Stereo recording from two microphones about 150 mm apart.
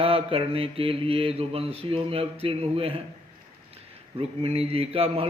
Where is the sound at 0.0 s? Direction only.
40° right (ahead or behind).